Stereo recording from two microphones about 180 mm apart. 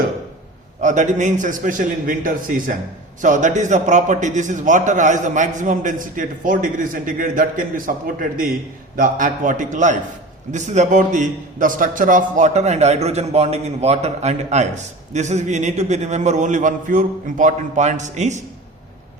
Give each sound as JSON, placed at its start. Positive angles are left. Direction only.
{"t": 0.8, "sound": "a man's voice", "side_deg": -40}